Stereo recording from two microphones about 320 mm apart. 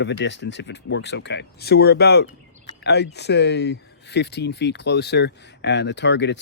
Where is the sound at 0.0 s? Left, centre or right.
Left.